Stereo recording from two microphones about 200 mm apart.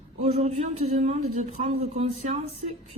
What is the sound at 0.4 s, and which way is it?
Speech, 35° right (ahead or behind).